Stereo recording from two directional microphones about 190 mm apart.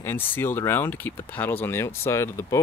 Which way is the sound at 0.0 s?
10° left (ahead or behind).